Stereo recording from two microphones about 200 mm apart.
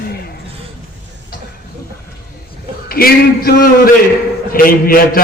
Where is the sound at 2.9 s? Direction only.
50° left (ahead or behind).